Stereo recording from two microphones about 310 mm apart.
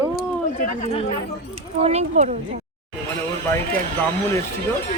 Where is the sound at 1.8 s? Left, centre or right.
Right.